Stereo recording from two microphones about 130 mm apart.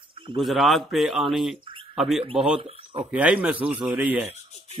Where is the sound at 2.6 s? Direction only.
50° right (ahead or behind).